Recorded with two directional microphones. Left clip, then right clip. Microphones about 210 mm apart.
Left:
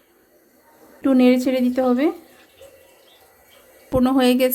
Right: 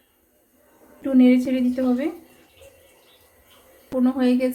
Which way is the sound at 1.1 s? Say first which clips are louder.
Left 2 dB; 50° left (ahead or behind).